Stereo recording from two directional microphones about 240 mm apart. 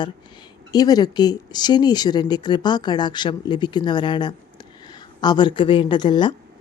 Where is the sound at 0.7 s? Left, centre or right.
Centre.